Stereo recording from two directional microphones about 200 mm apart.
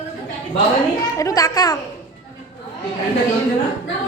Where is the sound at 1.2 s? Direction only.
15° left (ahead or behind).